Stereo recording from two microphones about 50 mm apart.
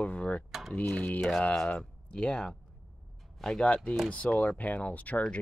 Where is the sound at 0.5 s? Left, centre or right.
Centre.